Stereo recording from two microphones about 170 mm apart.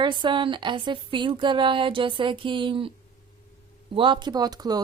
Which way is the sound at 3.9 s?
30° right (ahead or behind).